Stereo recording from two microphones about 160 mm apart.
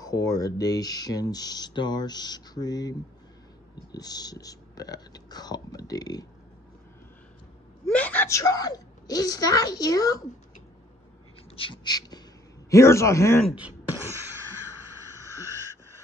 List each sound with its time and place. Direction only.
0.0 s speech: 25° left (ahead or behind)
7.8 s a sound: 10° left (ahead or behind)
8.3 s speech: 20° left (ahead or behind)
11.5 s a man's voice: 30° left (ahead or behind)
13.4 s speech: 5° right (ahead or behind)